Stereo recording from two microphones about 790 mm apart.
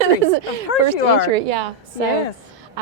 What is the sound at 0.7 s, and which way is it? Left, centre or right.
Speech, left.